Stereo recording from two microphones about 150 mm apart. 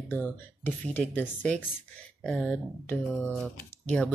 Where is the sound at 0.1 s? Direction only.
15° left (ahead or behind).